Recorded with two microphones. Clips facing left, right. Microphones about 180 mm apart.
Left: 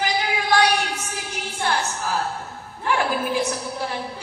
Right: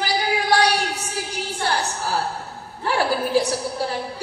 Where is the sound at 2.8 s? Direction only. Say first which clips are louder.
Right 1 dB; 35° right (ahead or behind).